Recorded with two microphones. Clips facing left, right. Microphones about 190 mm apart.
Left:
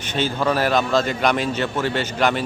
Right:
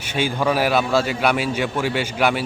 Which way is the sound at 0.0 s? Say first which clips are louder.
Even; 10° right (ahead or behind).